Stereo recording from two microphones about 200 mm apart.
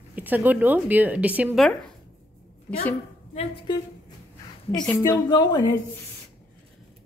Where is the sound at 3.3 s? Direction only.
30° left (ahead or behind).